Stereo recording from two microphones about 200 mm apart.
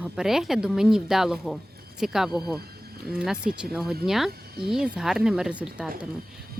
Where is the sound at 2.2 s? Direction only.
20° left (ahead or behind).